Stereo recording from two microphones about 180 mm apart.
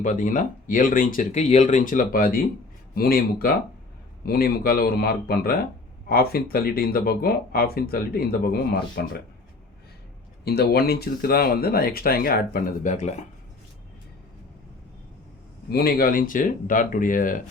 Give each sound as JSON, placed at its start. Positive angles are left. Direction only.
{"t": 0.0, "sound": "speech", "side_deg": 45}
{"t": 10.4, "sound": "speech", "side_deg": 60}
{"t": 15.7, "sound": "speech", "side_deg": 55}